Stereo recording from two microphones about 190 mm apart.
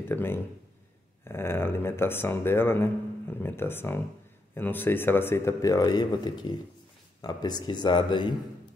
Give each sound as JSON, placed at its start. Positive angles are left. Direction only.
{"t": 0.1, "sound": "speech", "side_deg": 10}